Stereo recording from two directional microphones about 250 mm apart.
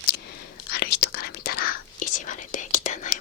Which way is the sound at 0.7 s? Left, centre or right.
Left.